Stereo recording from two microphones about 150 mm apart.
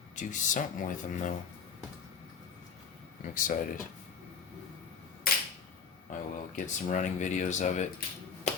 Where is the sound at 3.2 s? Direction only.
65° left (ahead or behind).